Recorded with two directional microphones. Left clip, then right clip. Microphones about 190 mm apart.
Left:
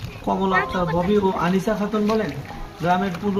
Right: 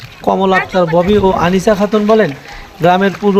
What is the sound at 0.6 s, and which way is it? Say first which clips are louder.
Speech: right 10 dB; 35° right (ahead or behind).